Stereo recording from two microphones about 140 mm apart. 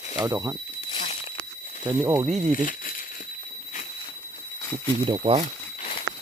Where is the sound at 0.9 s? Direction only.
40° left (ahead or behind).